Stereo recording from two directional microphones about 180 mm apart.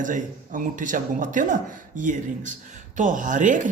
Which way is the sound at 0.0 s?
45° right (ahead or behind).